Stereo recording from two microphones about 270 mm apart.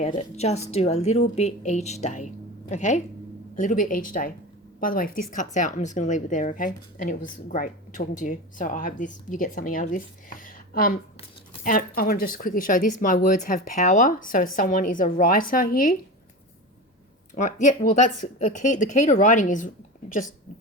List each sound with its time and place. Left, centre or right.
0.0 s speech: left
17.3 s speech: left